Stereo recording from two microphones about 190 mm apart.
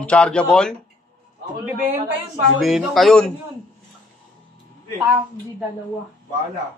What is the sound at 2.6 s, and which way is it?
Speech, centre (ahead or behind).